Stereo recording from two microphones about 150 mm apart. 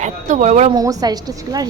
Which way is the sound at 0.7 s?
25° right (ahead or behind).